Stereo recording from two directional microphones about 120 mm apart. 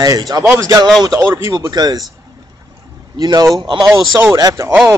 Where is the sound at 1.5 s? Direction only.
35° right (ahead or behind).